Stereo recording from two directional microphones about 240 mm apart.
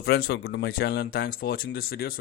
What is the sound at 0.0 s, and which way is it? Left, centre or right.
Speech, left.